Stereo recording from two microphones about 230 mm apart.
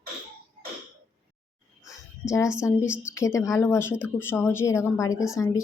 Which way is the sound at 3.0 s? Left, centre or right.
Centre.